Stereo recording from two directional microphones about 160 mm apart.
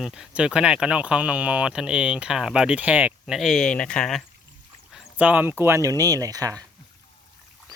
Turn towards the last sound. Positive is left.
turn(degrees=-20)  # may be behind; listen again after turning